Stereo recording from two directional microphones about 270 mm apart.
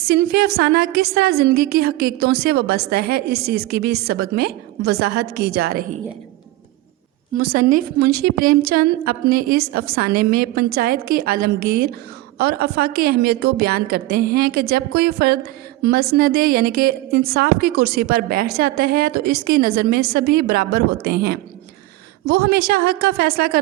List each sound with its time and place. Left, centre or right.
0.0 s a woman's voice: right
7.4 s a woman's voice: right